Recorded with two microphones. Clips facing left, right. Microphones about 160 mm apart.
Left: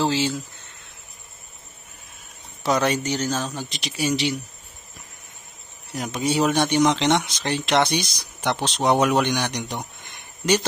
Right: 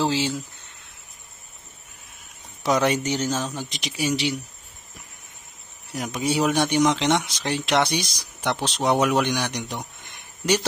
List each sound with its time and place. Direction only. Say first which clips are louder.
0.0 s speech: left 1 dB; 15° right (ahead or behind)
2.6 s speech: even; 15° right (ahead or behind)
5.9 s a man's voice: left 1 dB; 10° right (ahead or behind)